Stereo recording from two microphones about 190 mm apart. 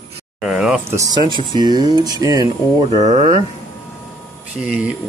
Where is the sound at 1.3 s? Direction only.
25° right (ahead or behind).